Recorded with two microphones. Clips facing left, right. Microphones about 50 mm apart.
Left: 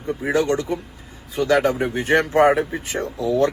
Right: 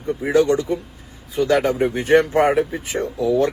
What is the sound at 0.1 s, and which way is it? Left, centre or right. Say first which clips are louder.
Speech: right 3 dB; left.